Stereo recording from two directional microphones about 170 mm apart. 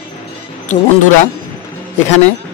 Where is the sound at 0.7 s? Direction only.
50° left (ahead or behind).